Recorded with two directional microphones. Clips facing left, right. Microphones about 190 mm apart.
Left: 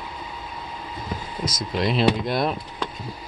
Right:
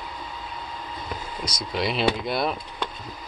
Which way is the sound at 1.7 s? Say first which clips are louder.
Left 3 dB; centre (ahead or behind).